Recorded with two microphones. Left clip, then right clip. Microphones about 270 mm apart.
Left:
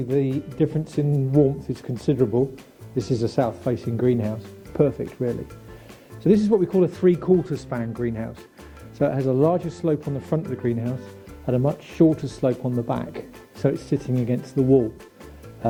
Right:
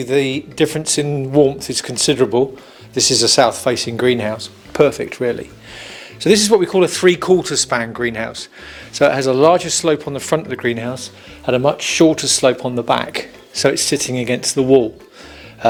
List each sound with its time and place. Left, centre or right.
0.1 s speech: centre
1.1 s speech: right
1.5 s speech: centre
3.5 s speech: centre
3.8 s speech: centre
14.5 s speech: right